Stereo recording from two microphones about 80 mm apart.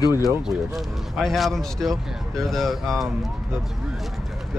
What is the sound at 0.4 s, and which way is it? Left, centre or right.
Speech, centre.